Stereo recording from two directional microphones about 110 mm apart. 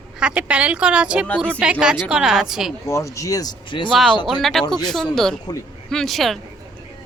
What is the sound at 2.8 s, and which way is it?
Speech, 25° left (ahead or behind).